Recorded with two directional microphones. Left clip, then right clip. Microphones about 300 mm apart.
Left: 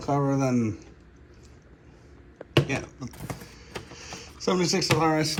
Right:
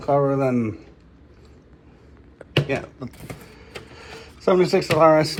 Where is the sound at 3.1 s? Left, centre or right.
Left.